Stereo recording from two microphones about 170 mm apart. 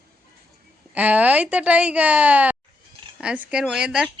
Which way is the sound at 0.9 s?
10° right (ahead or behind).